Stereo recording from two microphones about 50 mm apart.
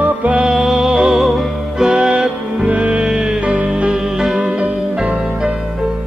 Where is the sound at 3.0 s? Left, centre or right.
Centre.